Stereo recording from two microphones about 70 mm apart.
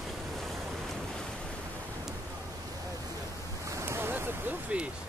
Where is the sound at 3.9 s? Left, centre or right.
Right.